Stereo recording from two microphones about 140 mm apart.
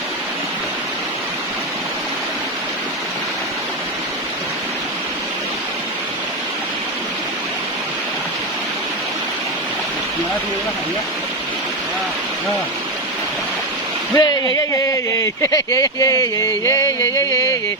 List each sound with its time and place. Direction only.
14.2 s speech: 25° left (ahead or behind)